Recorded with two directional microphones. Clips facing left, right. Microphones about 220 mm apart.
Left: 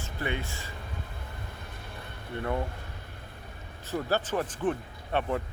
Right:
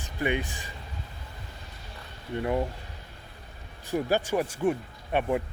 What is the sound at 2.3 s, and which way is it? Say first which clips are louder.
Speech: right 4 dB; 15° right (ahead or behind).